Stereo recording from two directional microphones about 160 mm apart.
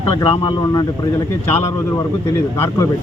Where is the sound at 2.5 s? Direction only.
15° left (ahead or behind).